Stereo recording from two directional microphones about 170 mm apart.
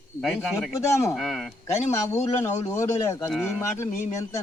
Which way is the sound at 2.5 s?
15° left (ahead or behind).